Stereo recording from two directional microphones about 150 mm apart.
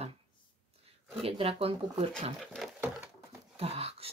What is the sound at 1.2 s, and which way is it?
Speech, 40° right (ahead or behind).